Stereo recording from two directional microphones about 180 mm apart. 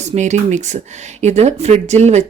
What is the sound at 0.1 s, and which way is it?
A woman's voice, 40° right (ahead or behind).